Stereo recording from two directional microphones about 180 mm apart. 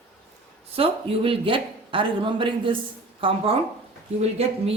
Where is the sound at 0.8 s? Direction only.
30° right (ahead or behind).